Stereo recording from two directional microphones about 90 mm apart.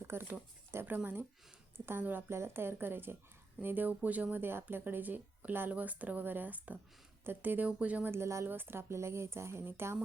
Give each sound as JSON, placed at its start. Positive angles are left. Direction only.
{"t": 0.1, "sound": "speech", "side_deg": -25}
{"t": 8.1, "sound": "speech", "side_deg": -30}